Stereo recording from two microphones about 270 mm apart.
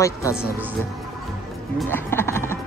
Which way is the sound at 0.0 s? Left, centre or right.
Centre.